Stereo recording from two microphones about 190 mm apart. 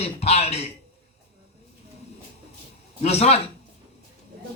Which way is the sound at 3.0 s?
35° left (ahead or behind).